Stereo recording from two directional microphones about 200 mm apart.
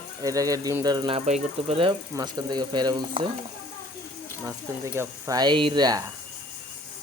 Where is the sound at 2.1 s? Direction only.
20° right (ahead or behind).